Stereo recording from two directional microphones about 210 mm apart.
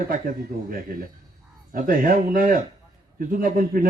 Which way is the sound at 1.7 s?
40° right (ahead or behind).